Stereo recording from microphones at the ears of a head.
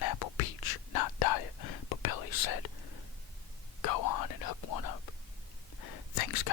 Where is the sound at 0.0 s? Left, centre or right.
Left.